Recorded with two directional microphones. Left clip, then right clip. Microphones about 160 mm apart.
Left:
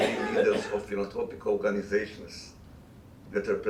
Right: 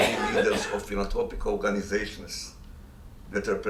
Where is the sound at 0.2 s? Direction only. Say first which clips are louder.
Right 1 dB; 30° right (ahead or behind).